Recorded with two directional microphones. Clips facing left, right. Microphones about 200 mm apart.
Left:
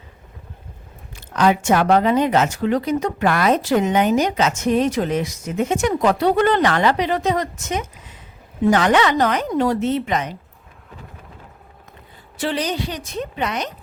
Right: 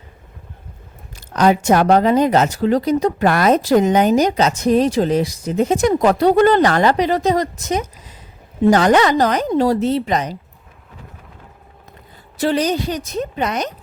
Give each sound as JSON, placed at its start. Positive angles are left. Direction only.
{"t": 1.1, "sound": "speech", "side_deg": -40}
{"t": 12.4, "sound": "speech", "side_deg": -40}